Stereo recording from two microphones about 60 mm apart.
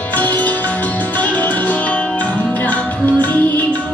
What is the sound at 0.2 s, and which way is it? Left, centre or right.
Music, left.